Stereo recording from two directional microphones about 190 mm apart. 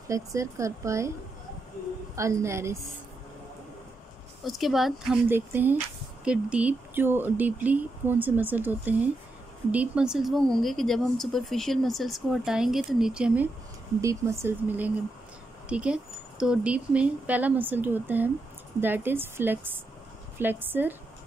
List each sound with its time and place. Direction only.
0.1 s speech: 15° right (ahead or behind)
2.1 s speech: 15° right (ahead or behind)
4.4 s speech: centre (ahead or behind)